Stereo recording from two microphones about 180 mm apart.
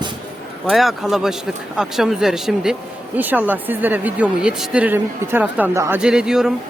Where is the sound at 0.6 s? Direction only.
Centre (ahead or behind).